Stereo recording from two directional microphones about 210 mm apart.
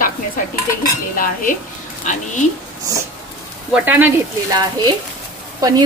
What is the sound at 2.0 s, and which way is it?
Speech, 35° left (ahead or behind).